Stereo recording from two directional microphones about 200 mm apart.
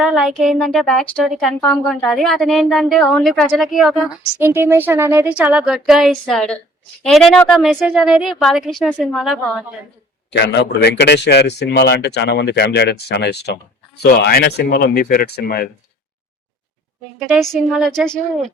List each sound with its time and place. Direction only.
0.0 s a woman's voice: 5° right (ahead or behind)
4.4 s a woman's voice: 10° right (ahead or behind)
10.3 s speech: 60° left (ahead or behind)
17.2 s a woman's voice: centre (ahead or behind)